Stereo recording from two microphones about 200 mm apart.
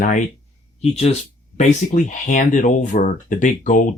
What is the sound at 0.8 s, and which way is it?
Speech, 30° left (ahead or behind).